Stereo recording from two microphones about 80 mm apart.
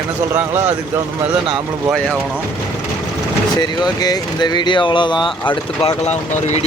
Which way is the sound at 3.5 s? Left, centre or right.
Left.